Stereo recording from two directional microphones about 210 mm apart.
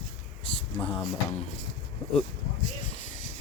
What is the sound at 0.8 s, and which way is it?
Speech, 25° left (ahead or behind).